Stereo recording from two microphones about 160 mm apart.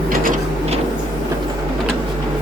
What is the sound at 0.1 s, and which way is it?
Mechanisms, 60° right (ahead or behind).